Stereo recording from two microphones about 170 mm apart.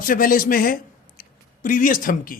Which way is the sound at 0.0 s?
55° left (ahead or behind).